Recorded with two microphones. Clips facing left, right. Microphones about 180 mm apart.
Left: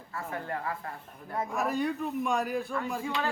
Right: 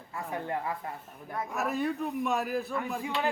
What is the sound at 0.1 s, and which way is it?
Speech, 15° right (ahead or behind).